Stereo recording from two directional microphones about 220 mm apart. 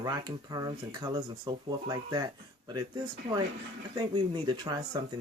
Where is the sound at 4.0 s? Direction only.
20° right (ahead or behind).